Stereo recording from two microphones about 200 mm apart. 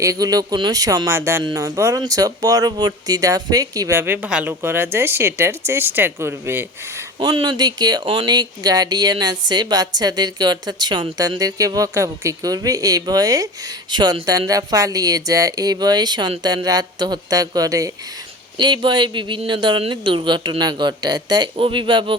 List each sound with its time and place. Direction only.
0.0 s speech: 15° right (ahead or behind)
7.2 s speech: 20° right (ahead or behind)